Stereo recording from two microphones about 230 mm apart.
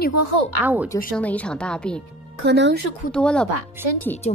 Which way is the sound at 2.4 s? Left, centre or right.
Right.